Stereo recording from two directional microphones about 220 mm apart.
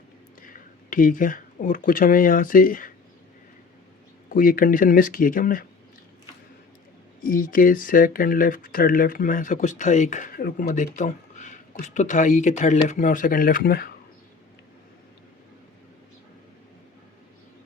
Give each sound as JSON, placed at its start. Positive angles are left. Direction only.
{"t": 0.4, "sound": "speech", "side_deg": 40}
{"t": 4.3, "sound": "speech", "side_deg": 40}
{"t": 7.3, "sound": "speech", "side_deg": 40}